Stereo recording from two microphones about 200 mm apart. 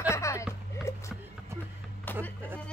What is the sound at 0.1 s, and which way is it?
Music, 15° left (ahead or behind).